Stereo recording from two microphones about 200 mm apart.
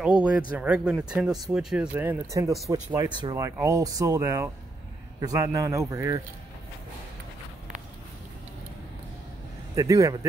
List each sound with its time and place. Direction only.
0.0 s speech: 5° right (ahead or behind)
9.8 s speech: 15° right (ahead or behind)